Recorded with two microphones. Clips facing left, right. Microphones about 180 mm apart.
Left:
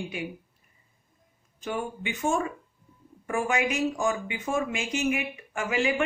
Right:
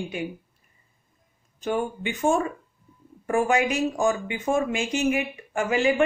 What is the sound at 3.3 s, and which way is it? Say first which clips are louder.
Speech: right 5 dB; 35° right (ahead or behind).